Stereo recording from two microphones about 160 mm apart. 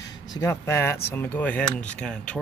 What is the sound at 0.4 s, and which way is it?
Speech, 15° left (ahead or behind).